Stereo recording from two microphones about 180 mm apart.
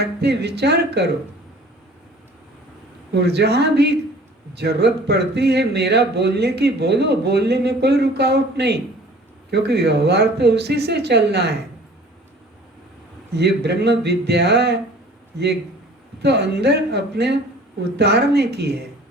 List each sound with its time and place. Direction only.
0.0 s a man's voice: 65° right (ahead or behind)
3.1 s a man's voice: 65° right (ahead or behind)
13.3 s a man's voice: 70° right (ahead or behind)